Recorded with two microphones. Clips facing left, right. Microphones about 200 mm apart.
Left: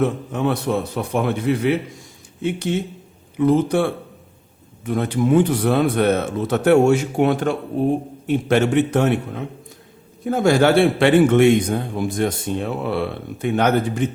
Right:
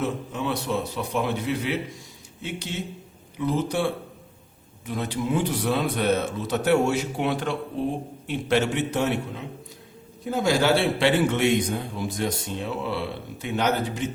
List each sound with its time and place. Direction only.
0.0 s a man's voice: 55° left (ahead or behind)